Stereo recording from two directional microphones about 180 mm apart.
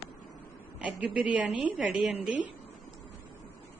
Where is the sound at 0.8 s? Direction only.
5° right (ahead or behind).